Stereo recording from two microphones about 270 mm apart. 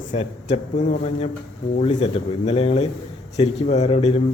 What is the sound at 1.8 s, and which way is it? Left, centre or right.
A man's voice, left.